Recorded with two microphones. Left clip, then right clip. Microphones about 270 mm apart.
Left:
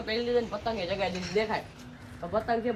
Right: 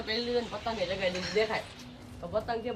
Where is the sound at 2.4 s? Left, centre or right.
Centre.